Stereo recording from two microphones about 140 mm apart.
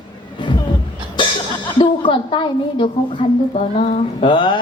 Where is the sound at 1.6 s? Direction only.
35° left (ahead or behind).